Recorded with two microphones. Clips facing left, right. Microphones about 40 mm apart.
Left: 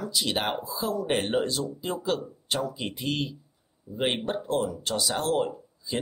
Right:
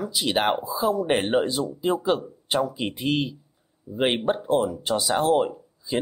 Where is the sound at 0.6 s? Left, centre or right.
Centre.